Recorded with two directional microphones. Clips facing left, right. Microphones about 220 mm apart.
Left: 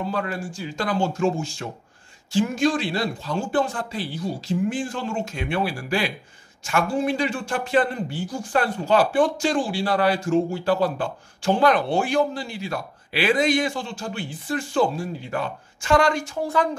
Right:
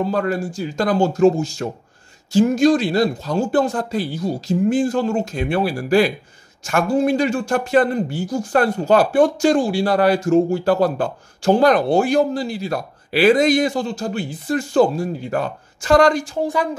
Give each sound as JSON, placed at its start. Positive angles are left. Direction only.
{"t": 0.0, "sound": "speech", "side_deg": -40}